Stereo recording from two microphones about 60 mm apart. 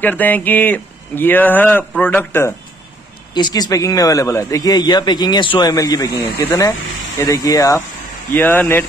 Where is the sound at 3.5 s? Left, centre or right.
Left.